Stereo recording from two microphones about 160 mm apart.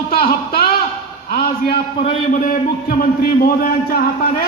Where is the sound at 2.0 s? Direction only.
50° left (ahead or behind).